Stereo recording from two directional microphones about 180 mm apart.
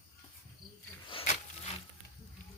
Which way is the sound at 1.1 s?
35° left (ahead or behind).